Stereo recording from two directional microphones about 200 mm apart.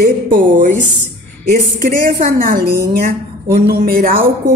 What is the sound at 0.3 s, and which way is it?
Speech, 40° right (ahead or behind).